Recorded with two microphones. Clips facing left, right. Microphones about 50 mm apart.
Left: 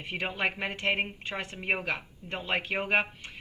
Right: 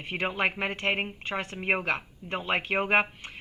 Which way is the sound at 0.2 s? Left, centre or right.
Right.